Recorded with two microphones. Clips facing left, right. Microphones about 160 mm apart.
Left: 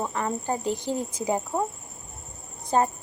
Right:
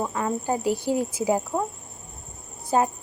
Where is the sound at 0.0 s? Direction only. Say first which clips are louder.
Right 2 dB; 5° right (ahead or behind).